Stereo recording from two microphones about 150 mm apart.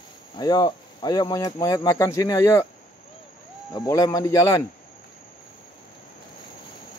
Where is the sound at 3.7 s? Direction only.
20° left (ahead or behind).